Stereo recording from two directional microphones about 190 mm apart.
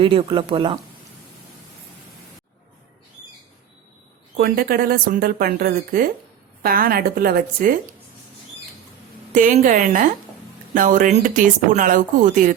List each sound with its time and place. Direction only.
0.0 s speech: 25° right (ahead or behind)
4.4 s speech: 50° right (ahead or behind)
9.3 s speech: 45° right (ahead or behind)